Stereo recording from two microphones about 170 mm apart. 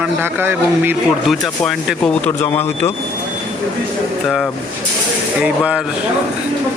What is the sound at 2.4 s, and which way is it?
Speech, 15° left (ahead or behind).